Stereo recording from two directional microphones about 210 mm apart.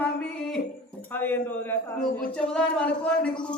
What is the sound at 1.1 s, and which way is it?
Speech, 10° left (ahead or behind).